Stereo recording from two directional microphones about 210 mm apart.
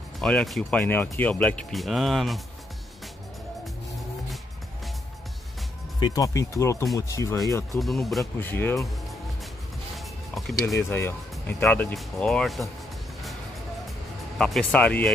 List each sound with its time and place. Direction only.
0.2 s speech: 5° left (ahead or behind)
5.9 s speech: 20° left (ahead or behind)
7.8 s speech: centre (ahead or behind)
9.9 s music: centre (ahead or behind)
10.8 s speech: 10° left (ahead or behind)
14.4 s speech: 5° left (ahead or behind)